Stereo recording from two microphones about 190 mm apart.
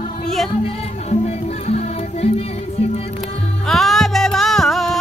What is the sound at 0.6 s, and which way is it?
Music, 35° left (ahead or behind).